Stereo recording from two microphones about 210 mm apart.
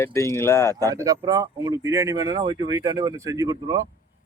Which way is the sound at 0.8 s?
15° right (ahead or behind).